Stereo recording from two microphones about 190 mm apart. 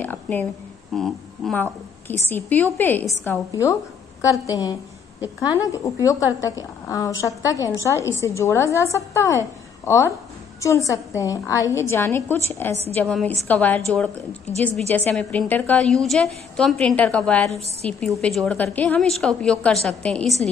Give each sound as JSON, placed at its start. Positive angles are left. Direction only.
{"t": 0.0, "sound": "a sound", "side_deg": 10}
{"t": 0.9, "sound": "a woman's voice", "side_deg": 0}
{"t": 15.0, "sound": "a woman's voice", "side_deg": 10}